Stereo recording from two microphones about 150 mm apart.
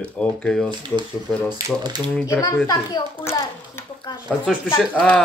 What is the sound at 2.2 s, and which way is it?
A child's voice, 20° left (ahead or behind).